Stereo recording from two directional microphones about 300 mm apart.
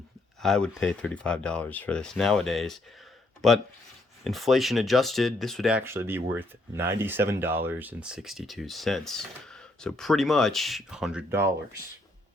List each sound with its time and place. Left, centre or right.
0.4 s speech: centre